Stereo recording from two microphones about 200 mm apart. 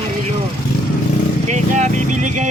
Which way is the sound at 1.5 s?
35° right (ahead or behind).